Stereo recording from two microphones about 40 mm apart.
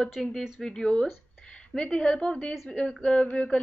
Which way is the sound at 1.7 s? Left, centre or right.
Left.